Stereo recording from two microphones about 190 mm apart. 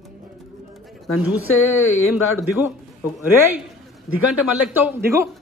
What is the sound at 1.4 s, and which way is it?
Speech, 90° left.